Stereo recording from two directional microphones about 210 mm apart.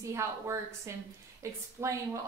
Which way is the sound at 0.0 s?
15° right (ahead or behind).